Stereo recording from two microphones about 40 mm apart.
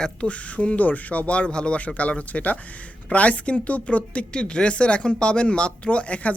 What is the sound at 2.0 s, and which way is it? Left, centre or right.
Speech, left.